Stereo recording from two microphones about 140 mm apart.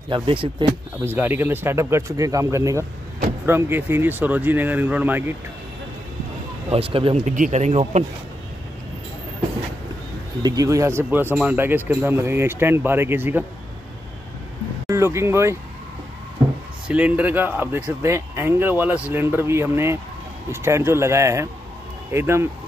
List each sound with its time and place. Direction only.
0.1 s speech: 40° right (ahead or behind)
1.0 s speech: 15° right (ahead or behind)
6.7 s speech: 40° right (ahead or behind)
7.2 s speech: 60° right (ahead or behind)
10.4 s speech: 25° right (ahead or behind)
14.9 s speech: 20° right (ahead or behind)
16.8 s speech: 10° right (ahead or behind)